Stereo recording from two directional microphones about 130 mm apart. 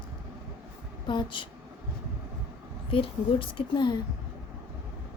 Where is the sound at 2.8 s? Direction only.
45° left (ahead or behind).